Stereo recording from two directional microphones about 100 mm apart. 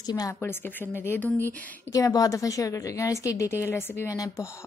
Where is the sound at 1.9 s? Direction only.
35° left (ahead or behind).